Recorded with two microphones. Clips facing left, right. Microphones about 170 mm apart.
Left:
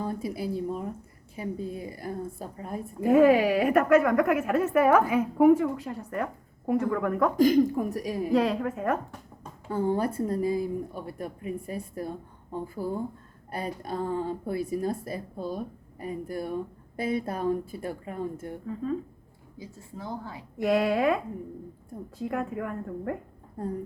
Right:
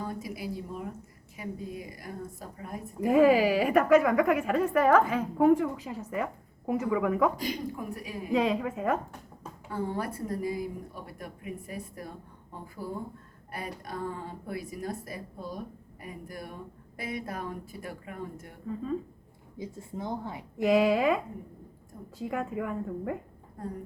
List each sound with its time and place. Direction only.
0.0 s a woman's voice: 30° left (ahead or behind)
3.0 s a woman's voice: centre (ahead or behind)
7.3 s a woman's voice: 45° left (ahead or behind)
8.3 s a woman's voice: centre (ahead or behind)
9.7 s a woman's voice: 30° left (ahead or behind)
13.5 s a woman's voice: 30° left (ahead or behind)
19.5 s a woman's voice: 25° right (ahead or behind)
20.6 s a woman's voice: centre (ahead or behind)
22.2 s a woman's voice: centre (ahead or behind)